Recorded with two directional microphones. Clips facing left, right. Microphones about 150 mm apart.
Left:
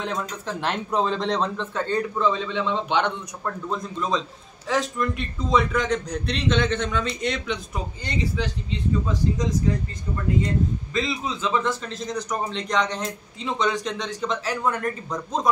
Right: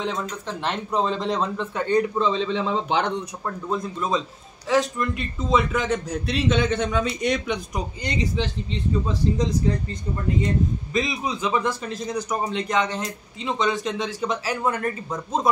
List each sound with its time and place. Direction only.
0.0 s speech: centre (ahead or behind)
1.8 s a man's voice: 15° right (ahead or behind); by 3.1 s 35° right (ahead or behind)
3.6 s a man's voice: 5° right (ahead or behind)
10.4 s a man's voice: 15° right (ahead or behind)